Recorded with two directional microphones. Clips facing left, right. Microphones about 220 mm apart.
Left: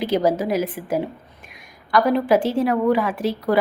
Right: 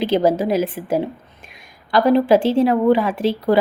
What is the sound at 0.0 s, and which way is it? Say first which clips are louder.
A woman's voice: right 3 dB; 25° right (ahead or behind).